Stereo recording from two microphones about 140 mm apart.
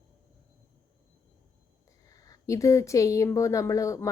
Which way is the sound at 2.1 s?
25° left (ahead or behind).